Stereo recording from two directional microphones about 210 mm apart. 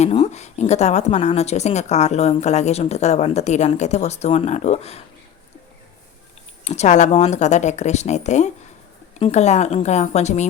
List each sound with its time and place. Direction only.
0.0 s speech: 30° left (ahead or behind)
6.7 s speech: 35° left (ahead or behind)